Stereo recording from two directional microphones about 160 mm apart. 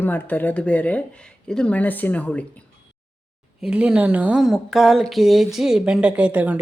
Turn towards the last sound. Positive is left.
turn(degrees=-10)  # may be behind; listen again after turning